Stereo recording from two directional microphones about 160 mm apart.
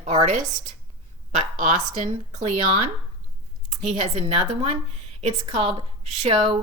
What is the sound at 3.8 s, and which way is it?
Speech, 45° right (ahead or behind).